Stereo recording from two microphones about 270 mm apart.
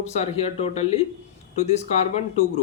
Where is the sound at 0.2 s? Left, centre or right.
Left.